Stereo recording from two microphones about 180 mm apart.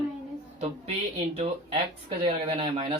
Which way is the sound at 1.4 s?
30° right (ahead or behind).